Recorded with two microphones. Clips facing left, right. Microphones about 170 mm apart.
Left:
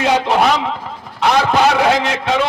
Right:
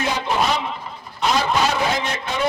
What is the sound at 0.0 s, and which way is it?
Speech, 85° left.